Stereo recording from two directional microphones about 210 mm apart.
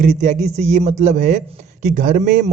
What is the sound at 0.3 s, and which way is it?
A man's voice, 35° right (ahead or behind).